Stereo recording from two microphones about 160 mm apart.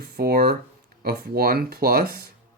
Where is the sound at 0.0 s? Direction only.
75° right (ahead or behind).